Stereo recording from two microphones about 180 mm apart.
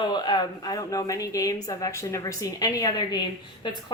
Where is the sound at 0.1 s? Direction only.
25° left (ahead or behind).